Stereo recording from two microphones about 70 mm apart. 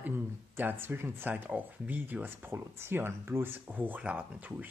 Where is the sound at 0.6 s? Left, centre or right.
Right.